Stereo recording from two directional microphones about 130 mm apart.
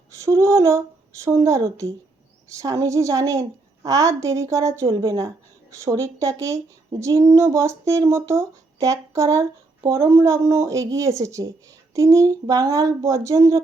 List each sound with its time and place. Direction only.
0.3 s speech: 25° right (ahead or behind)